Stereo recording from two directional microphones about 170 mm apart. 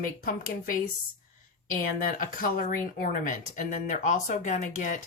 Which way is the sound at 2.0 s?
55° left (ahead or behind).